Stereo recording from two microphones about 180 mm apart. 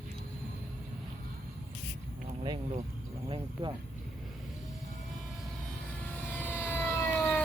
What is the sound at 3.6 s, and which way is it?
Speech, 25° right (ahead or behind).